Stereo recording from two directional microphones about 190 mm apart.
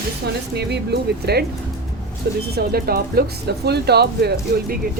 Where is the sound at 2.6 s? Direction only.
55° right (ahead or behind).